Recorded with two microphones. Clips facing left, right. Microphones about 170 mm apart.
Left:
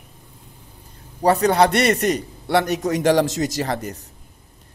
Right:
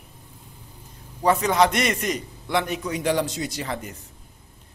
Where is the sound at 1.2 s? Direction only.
35° left (ahead or behind).